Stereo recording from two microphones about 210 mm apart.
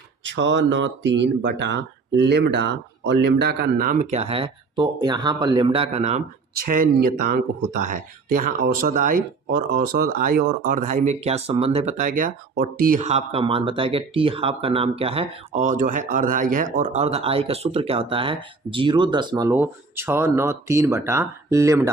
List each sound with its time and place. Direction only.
0.3 s speech: 60° right (ahead or behind); by 6.2 s 30° right (ahead or behind)
6.7 s speech: 45° right (ahead or behind); by 21.8 s 15° right (ahead or behind)